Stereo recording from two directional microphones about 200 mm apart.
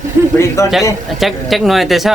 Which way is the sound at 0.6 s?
15° left (ahead or behind).